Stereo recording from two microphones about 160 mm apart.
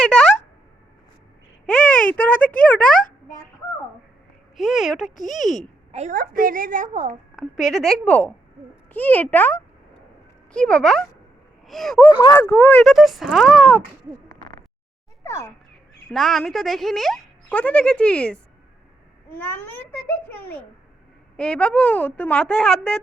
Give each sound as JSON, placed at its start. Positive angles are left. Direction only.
{"t": 0.0, "sound": "a sound", "side_deg": 5}
{"t": 1.6, "sound": "a sound", "side_deg": 10}
{"t": 4.5, "sound": "speech", "side_deg": 0}
{"t": 5.9, "sound": "a woman's voice", "side_deg": -45}
{"t": 6.1, "sound": "a woman's voice", "side_deg": -60}
{"t": 7.3, "sound": "a woman's voice", "side_deg": 0}
{"t": 12.0, "sound": "a woman's voice", "side_deg": 15}
{"t": 12.8, "sound": "speech", "side_deg": 0}
{"t": 15.2, "sound": "speech", "side_deg": 15}
{"t": 16.1, "sound": "speech", "side_deg": 0}
{"t": 19.4, "sound": "a woman's voice", "side_deg": 10}